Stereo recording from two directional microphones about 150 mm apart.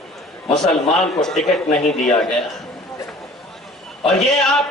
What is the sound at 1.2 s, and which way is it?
Speech, 5° left (ahead or behind).